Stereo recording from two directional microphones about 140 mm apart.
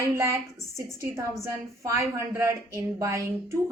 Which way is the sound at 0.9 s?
20° right (ahead or behind).